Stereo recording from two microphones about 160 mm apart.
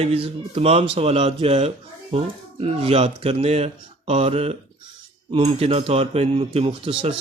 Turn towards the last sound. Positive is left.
turn(degrees=-35)  # may be behind; listen again after turning